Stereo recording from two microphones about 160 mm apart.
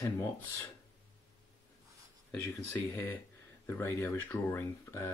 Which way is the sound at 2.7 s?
15° left (ahead or behind).